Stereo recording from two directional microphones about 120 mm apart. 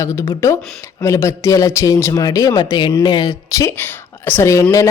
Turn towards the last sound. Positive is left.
turn(degrees=20)  # may be behind; listen again after turning